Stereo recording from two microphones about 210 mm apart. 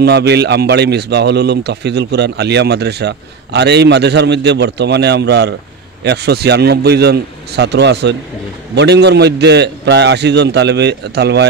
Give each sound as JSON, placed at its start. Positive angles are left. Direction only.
{"t": 0.0, "sound": "a man's voice", "side_deg": -50}